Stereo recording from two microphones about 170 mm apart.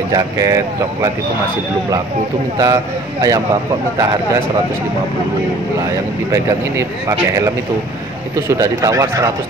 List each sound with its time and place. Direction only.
0.1 s speech: 20° right (ahead or behind)
2.5 s speech: 20° right (ahead or behind)
6.3 s speech: 15° right (ahead or behind)